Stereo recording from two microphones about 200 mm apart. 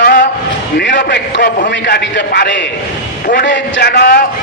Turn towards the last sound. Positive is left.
turn(degrees=50)  # may be behind; listen again after turning